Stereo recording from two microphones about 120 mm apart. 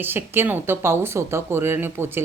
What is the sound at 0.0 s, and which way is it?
A woman's voice, 15° right (ahead or behind).